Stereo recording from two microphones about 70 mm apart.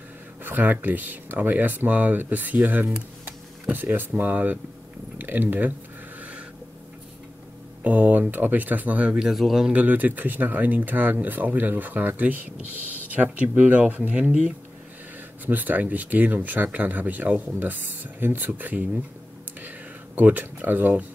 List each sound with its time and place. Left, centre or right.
0.4 s speech: right
7.8 s speech: right; by 9.7 s centre
9.7 s speech: right
15.4 s speech: right
20.2 s speech: right